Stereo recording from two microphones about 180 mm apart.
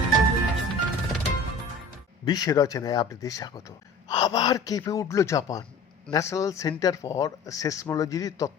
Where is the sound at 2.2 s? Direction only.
20° left (ahead or behind).